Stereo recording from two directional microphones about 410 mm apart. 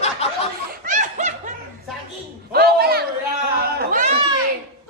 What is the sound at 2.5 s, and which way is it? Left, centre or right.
Speech, right.